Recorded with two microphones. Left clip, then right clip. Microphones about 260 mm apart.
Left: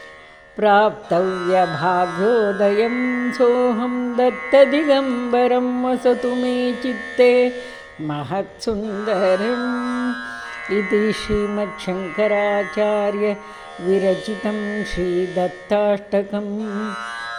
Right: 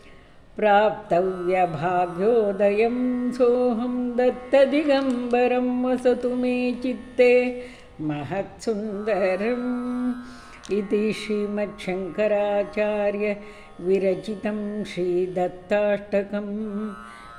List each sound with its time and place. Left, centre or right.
0.6 s music: left
11.5 s music: left